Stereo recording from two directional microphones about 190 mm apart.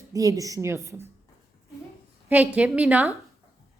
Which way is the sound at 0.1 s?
15° right (ahead or behind).